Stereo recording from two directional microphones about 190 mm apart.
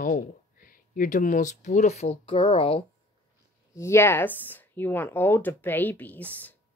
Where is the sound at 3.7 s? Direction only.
15° left (ahead or behind).